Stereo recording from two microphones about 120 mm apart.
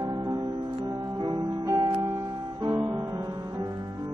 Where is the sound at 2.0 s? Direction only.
30° right (ahead or behind).